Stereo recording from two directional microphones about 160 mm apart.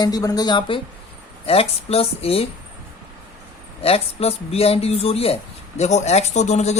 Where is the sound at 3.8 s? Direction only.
40° left (ahead or behind).